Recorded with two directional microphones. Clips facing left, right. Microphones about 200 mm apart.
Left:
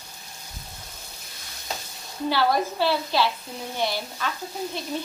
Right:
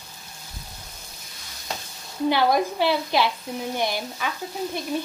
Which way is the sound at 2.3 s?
15° right (ahead or behind).